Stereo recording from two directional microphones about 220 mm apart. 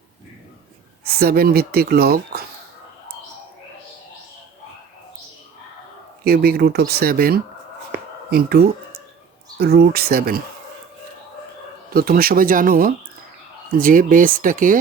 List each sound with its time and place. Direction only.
1.0 s speech: 45° right (ahead or behind)
6.2 s speech: 45° right (ahead or behind)
11.9 s speech: 40° right (ahead or behind)